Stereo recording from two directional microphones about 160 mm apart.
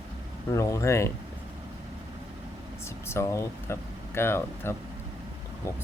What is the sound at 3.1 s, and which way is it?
Speech, 20° left (ahead or behind).